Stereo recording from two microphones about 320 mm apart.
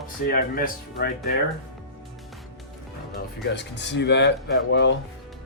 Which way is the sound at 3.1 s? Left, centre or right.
Left.